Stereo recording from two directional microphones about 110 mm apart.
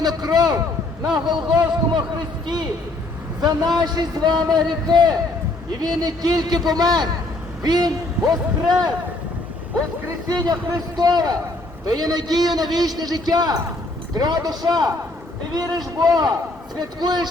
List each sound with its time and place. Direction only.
0.0 s a man's voice: 40° right (ahead or behind)
10.1 s a man's voice: 35° right (ahead or behind)